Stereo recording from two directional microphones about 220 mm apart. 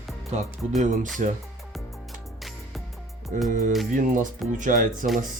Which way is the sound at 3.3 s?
35° right (ahead or behind).